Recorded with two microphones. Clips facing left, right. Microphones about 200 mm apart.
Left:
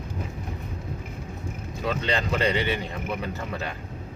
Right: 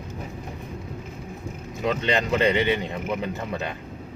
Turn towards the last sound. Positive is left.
turn(degrees=-20)  # may be behind; listen again after turning